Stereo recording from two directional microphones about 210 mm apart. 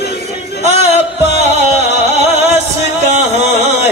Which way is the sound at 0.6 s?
30° right (ahead or behind).